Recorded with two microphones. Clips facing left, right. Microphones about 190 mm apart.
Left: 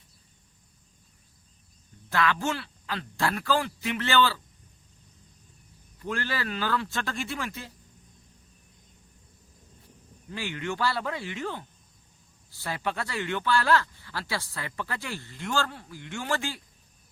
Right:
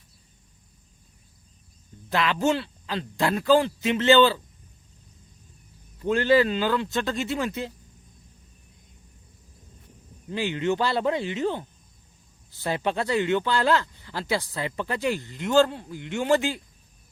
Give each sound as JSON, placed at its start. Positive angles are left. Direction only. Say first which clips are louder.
{"t": 2.0, "sound": "speech", "louder": "right 4 dB", "side_deg": -20}
{"t": 6.0, "sound": "speech", "louder": "right 12 dB", "side_deg": -20}
{"t": 10.2, "sound": "speech", "louder": "right 8 dB", "side_deg": -20}